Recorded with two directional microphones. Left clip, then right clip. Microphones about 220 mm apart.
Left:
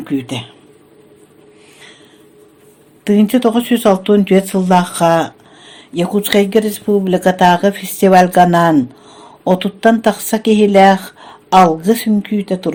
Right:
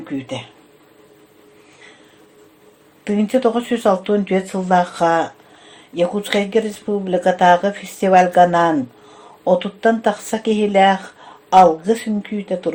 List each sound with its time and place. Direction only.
0.0 s speech: 45° left (ahead or behind)
3.0 s speech: 45° left (ahead or behind)